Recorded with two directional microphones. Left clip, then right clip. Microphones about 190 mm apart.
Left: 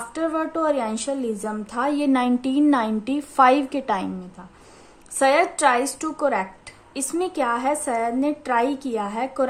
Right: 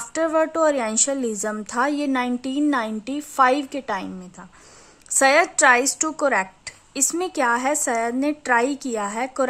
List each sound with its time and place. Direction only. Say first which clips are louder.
0.1 s a woman's voice: right 5 dB; 25° right (ahead or behind)